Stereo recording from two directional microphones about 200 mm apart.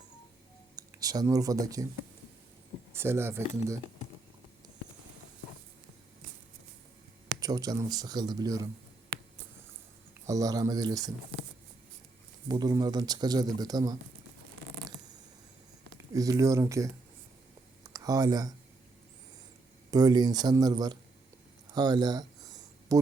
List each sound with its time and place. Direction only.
0.8 s speech: 20° right (ahead or behind)
2.9 s speech: 10° right (ahead or behind)
7.3 s speech: 20° right (ahead or behind)
9.1 s a sound: 55° right (ahead or behind)
10.2 s speech: 15° right (ahead or behind)
12.5 s speech: 20° right (ahead or behind)
16.1 s speech: 15° right (ahead or behind)
17.9 s speech: 20° right (ahead or behind)
19.9 s speech: 20° right (ahead or behind)
21.7 s a sound: 20° right (ahead or behind)